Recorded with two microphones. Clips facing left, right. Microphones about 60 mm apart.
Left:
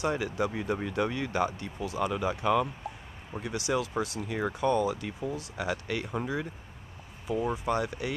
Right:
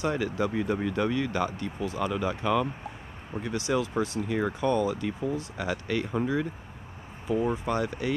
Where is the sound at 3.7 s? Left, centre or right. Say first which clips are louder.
Right 2 dB; centre.